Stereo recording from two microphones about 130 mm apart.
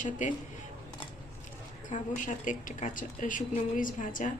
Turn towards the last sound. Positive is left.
turn(degrees=85)